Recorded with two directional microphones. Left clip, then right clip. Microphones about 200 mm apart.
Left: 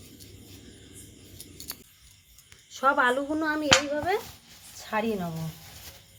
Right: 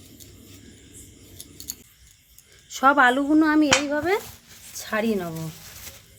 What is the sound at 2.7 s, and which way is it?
Speech, 55° right (ahead or behind).